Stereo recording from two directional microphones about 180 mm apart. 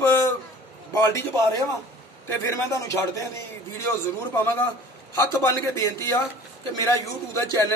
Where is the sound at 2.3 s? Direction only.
15° left (ahead or behind).